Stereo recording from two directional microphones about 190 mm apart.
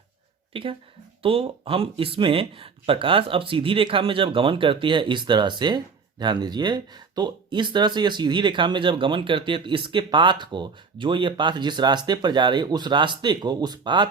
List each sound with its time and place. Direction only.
0.5 s speech: 30° right (ahead or behind)